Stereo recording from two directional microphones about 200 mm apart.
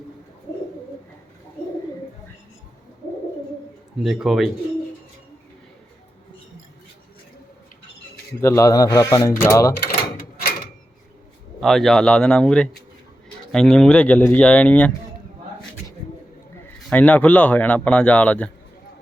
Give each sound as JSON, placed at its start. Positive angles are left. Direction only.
{"t": 4.0, "sound": "speech", "side_deg": 0}
{"t": 8.4, "sound": "a man's voice", "side_deg": 15}
{"t": 11.6, "sound": "a man's voice", "side_deg": 0}
{"t": 16.9, "sound": "a man's voice", "side_deg": 5}